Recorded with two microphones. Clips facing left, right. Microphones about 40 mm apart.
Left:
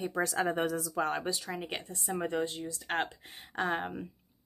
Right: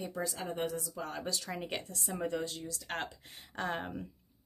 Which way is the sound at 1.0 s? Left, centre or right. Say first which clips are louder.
Left 9 dB; left.